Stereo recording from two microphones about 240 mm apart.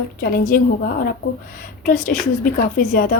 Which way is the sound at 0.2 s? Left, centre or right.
Left.